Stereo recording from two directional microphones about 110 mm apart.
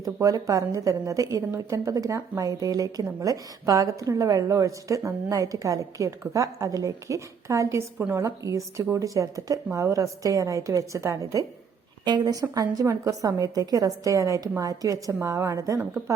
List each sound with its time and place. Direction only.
0.0 s a woman's voice: 30° right (ahead or behind)
12.0 s a woman's voice: 40° right (ahead or behind)